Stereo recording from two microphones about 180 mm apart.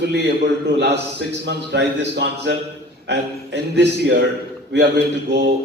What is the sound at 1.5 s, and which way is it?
Speech, 75° right (ahead or behind).